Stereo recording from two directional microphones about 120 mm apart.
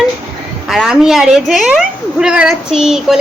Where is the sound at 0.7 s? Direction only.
5° right (ahead or behind).